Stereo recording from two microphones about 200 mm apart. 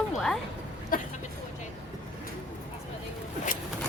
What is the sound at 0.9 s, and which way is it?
Speech, 45° left (ahead or behind).